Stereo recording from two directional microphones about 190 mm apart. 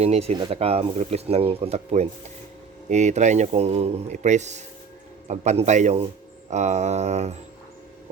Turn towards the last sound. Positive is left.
turn(degrees=-35)  # may be behind; listen again after turning